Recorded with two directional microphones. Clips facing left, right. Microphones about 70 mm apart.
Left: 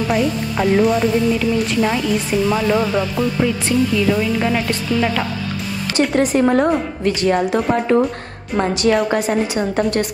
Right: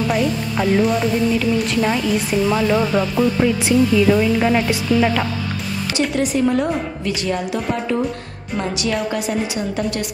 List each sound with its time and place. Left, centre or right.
0.1 s speech: centre
5.9 s a woman's voice: left
9.1 s a woman's voice: left